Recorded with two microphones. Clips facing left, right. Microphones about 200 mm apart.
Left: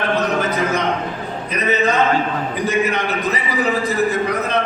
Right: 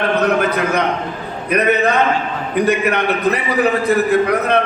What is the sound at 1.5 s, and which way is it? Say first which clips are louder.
A man's voice: right 4 dB; 60° right (ahead or behind).